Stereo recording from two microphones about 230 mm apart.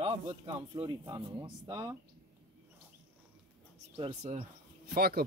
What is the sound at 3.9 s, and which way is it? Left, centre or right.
Speech, right.